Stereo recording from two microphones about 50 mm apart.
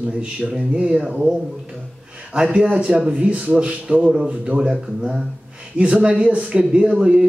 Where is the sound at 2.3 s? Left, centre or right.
Centre.